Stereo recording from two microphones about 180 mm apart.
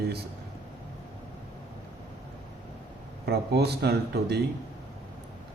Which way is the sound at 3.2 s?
65° right (ahead or behind).